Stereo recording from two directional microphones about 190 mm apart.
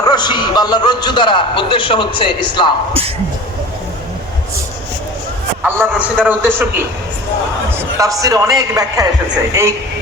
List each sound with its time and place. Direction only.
0.0 s speech: 20° left (ahead or behind)
5.6 s a man's voice: 10° right (ahead or behind)